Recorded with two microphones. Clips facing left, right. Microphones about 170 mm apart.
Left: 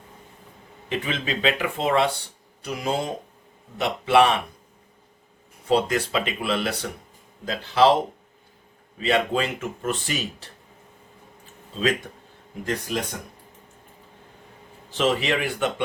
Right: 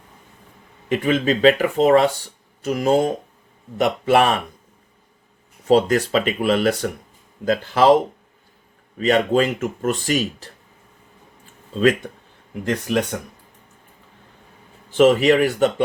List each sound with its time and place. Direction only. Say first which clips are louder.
0.9 s speech: right 9 dB; 50° right (ahead or behind)
5.6 s speech: right 6 dB; 45° right (ahead or behind)
9.0 s speech: right 6 dB; 45° right (ahead or behind)
12.6 s speech: right 6 dB; 70° right (ahead or behind)
14.9 s speech: right 9 dB; 45° right (ahead or behind)